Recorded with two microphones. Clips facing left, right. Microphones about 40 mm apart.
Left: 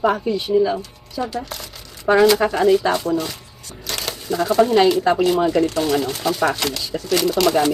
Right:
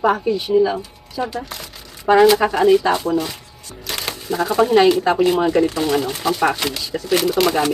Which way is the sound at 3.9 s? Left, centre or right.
Centre.